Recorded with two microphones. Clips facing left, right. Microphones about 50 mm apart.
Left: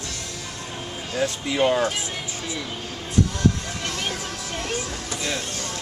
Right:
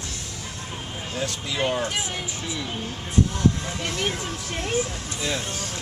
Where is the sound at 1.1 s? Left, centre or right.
Left.